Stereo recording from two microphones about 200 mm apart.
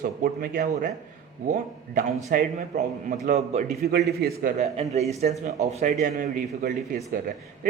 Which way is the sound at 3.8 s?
55° right (ahead or behind).